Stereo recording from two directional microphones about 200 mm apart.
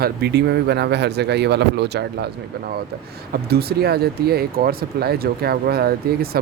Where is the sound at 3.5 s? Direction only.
50° right (ahead or behind).